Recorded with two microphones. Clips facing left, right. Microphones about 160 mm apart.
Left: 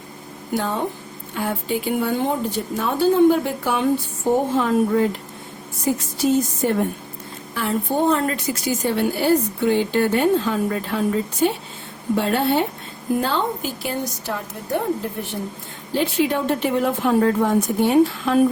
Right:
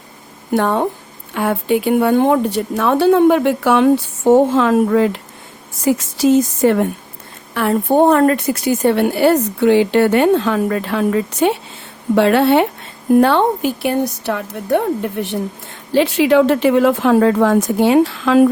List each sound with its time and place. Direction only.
0.5 s a woman's voice: 65° right (ahead or behind); by 6.8 s 90° right
7.5 s a woman's voice: 60° right (ahead or behind); by 12.6 s 80° right
13.1 s a woman's voice: 65° right (ahead or behind)
15.9 s a woman's voice: 80° right